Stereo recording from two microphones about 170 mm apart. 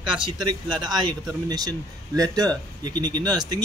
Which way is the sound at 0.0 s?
30° right (ahead or behind).